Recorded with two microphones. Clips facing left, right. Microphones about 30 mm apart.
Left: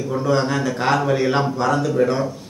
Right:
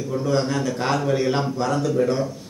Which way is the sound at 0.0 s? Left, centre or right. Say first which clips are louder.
Left 3 dB; centre.